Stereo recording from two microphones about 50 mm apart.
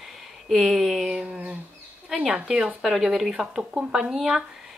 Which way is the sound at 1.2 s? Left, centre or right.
Right.